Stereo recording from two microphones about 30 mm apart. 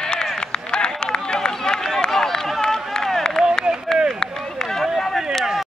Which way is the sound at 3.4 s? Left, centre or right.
Left.